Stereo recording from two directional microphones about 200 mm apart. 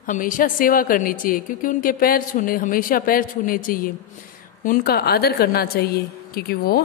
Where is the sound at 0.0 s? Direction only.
40° left (ahead or behind).